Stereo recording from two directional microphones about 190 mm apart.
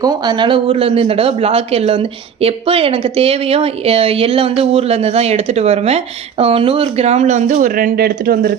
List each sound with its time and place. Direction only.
0.0 s a man's voice: 20° right (ahead or behind); by 8.5 s 50° right (ahead or behind)